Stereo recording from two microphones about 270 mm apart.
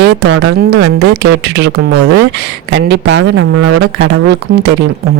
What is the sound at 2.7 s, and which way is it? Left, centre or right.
Speech, right.